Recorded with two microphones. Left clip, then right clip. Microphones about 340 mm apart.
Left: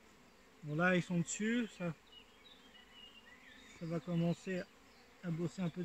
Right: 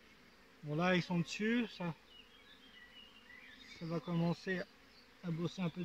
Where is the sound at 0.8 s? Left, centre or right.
Centre.